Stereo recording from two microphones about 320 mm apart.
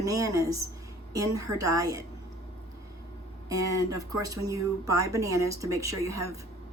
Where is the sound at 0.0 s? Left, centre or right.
Centre.